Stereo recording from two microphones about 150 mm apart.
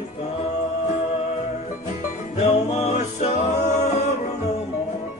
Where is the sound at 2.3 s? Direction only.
45° left (ahead or behind).